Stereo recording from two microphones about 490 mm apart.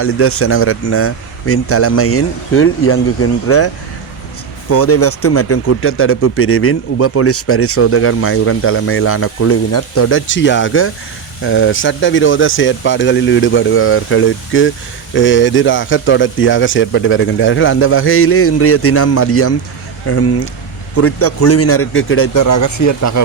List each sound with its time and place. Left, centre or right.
0.0 s speech: left
4.7 s speech: left